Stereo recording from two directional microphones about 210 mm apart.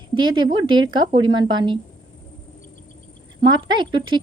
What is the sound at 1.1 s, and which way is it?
Speech, 20° right (ahead or behind).